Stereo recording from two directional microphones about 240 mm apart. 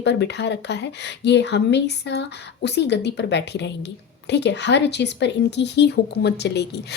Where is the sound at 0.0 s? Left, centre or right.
Left.